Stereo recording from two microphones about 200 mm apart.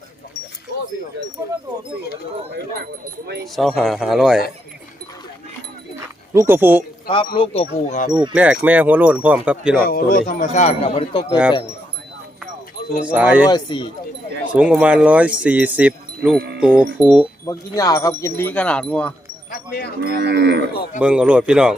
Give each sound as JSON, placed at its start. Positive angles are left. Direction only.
{"t": 3.4, "sound": "speech", "side_deg": 0}
{"t": 6.3, "sound": "speech", "side_deg": -15}
{"t": 7.3, "sound": "speech", "side_deg": 30}
{"t": 8.3, "sound": "speech", "side_deg": -5}
{"t": 9.8, "sound": "speech", "side_deg": 45}
{"t": 13.1, "sound": "speech", "side_deg": -5}
{"t": 13.5, "sound": "speech", "side_deg": 20}
{"t": 14.5, "sound": "speech", "side_deg": -5}
{"t": 17.4, "sound": "speech", "side_deg": 15}
{"t": 19.5, "sound": "wind chime", "side_deg": 50}
{"t": 20.0, "sound": "cattle", "side_deg": -60}
{"t": 20.7, "sound": "speech", "side_deg": 50}
{"t": 21.0, "sound": "speech", "side_deg": -5}